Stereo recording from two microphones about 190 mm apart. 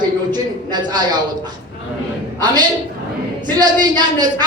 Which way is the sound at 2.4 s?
20° right (ahead or behind).